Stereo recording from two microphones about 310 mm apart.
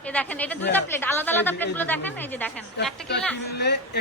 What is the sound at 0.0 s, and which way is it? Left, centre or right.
A woman's voice, centre.